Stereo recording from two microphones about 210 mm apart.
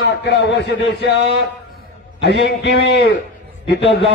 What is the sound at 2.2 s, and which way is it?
A man's voice, 55° left (ahead or behind).